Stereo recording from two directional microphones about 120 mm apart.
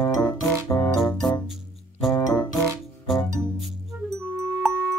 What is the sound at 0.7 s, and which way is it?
Music, 25° left (ahead or behind).